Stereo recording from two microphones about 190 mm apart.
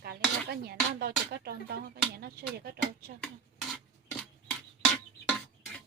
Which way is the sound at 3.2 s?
5° left (ahead or behind).